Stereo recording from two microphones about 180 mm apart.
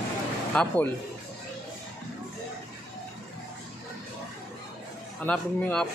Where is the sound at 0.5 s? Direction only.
10° left (ahead or behind).